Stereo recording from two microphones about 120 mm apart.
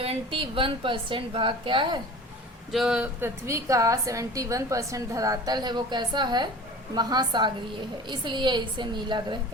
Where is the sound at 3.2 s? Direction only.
25° right (ahead or behind); by 9.4 s 40° right (ahead or behind).